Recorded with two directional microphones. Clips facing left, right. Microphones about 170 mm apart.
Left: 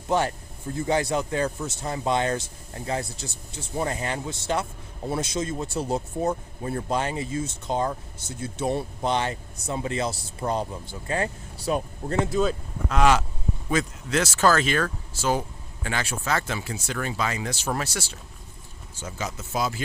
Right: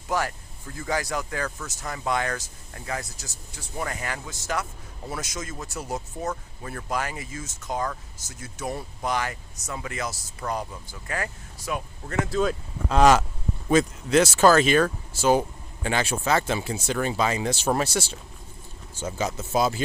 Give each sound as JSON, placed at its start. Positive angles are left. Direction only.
{"t": 0.1, "sound": "speech", "side_deg": 25}
{"t": 12.9, "sound": "speech", "side_deg": -40}
{"t": 14.1, "sound": "speech", "side_deg": -15}
{"t": 19.0, "sound": "speech", "side_deg": -25}